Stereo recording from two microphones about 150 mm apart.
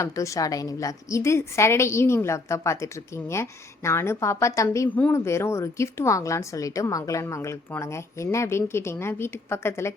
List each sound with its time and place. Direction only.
0.0 s a woman's voice: 20° left (ahead or behind)